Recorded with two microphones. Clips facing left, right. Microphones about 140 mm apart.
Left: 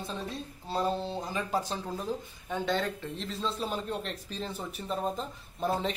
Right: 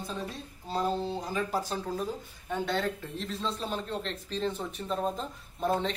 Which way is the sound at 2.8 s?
Centre (ahead or behind).